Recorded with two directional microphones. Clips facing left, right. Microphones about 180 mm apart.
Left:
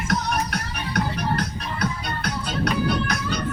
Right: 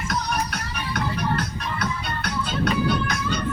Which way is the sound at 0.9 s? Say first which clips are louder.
Left 1 dB; 35° left (ahead or behind).